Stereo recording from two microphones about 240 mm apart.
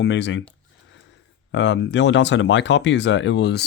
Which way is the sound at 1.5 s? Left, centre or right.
Left.